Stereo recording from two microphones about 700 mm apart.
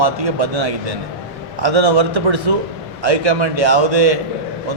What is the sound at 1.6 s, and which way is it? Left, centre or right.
A man's voice, right.